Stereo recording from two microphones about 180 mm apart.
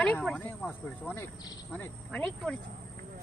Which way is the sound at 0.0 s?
5° left (ahead or behind).